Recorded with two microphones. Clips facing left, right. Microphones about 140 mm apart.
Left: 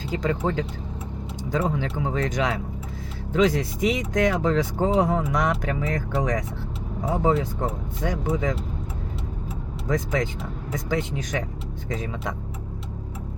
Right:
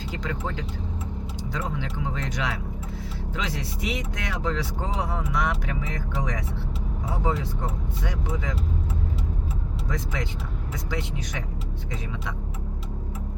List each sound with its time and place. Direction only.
0.1 s speech: 45° left (ahead or behind)
9.9 s speech: 45° left (ahead or behind)